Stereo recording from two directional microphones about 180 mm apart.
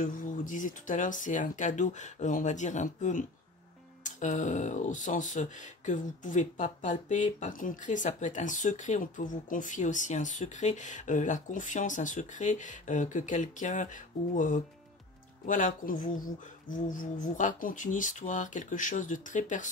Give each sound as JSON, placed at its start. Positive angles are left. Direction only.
{"t": 0.0, "sound": "speech", "side_deg": 50}